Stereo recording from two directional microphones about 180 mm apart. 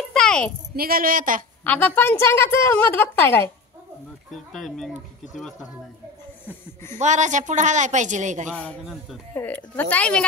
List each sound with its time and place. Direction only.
0.1 s a sound: 5° left (ahead or behind)
0.7 s a woman's voice: 55° right (ahead or behind)
1.6 s a woman's voice: 10° left (ahead or behind)
4.3 s speech: centre (ahead or behind)
7.0 s a woman's voice: 40° right (ahead or behind)
8.5 s a woman's voice: 5° left (ahead or behind)